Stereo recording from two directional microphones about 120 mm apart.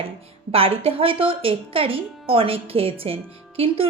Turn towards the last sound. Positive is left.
turn(degrees=-55)  # may be behind; listen again after turning